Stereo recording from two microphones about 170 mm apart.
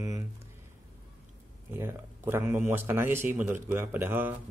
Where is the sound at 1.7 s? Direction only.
15° right (ahead or behind).